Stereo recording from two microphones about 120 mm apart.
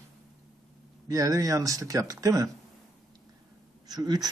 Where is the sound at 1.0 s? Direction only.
30° right (ahead or behind).